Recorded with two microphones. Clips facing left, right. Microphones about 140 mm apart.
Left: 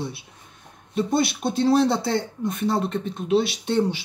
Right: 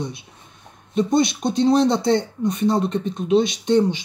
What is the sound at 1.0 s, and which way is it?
Speech, 5° left (ahead or behind).